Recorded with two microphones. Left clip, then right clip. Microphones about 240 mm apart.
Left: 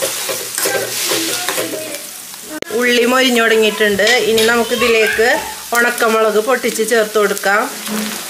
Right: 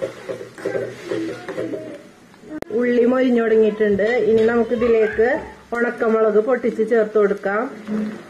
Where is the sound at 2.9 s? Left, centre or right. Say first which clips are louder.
Left 5 dB; centre.